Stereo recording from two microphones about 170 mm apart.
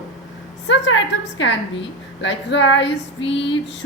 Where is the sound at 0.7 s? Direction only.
90° left.